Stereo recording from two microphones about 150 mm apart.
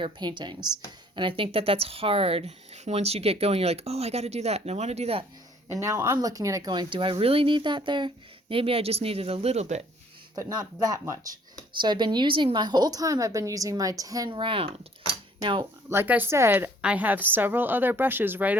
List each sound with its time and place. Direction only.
0.0 s a woman's voice: 30° right (ahead or behind)
5.6 s speech: 20° right (ahead or behind); by 9.8 s 50° right (ahead or behind)
10.3 s a woman's voice: 25° right (ahead or behind)
14.3 s speech: 35° right (ahead or behind)
15.9 s a woman's voice: 15° right (ahead or behind)